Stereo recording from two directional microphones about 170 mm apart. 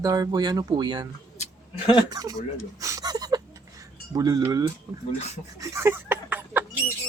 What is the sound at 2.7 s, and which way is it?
Chink, 20° right (ahead or behind).